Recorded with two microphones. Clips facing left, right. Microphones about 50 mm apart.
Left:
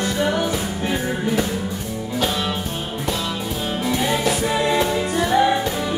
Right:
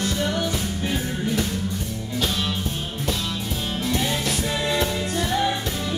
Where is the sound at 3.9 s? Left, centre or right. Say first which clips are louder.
Left 5 dB; centre.